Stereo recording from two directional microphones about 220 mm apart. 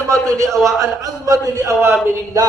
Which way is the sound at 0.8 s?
15° right (ahead or behind).